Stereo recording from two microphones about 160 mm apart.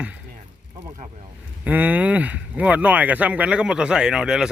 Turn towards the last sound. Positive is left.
turn(degrees=-5)  # may be behind; listen again after turning